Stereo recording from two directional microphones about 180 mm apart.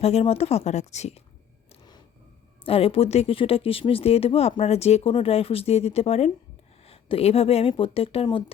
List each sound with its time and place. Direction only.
0.0 s speech: 35° left (ahead or behind)
1.7 s single-lens reflex camera: 25° left (ahead or behind)
2.6 s speech: 30° left (ahead or behind)